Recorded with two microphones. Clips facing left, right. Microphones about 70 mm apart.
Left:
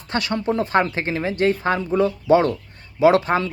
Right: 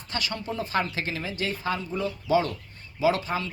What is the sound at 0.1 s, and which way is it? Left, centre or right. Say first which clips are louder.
Speech: left 9 dB; left.